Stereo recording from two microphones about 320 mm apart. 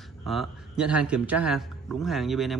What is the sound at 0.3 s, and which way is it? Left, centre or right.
A man's voice, centre.